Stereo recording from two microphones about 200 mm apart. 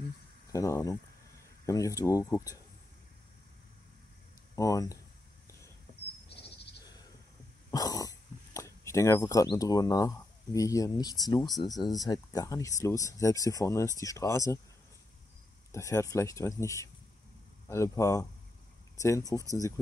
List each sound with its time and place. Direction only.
0.5 s speech: 15° left (ahead or behind)
4.6 s speech: 15° left (ahead or behind)
7.7 s speech: 20° left (ahead or behind)
15.7 s speech: 15° left (ahead or behind)